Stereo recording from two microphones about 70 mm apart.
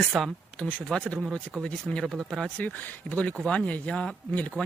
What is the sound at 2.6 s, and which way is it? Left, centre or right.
Speech, left.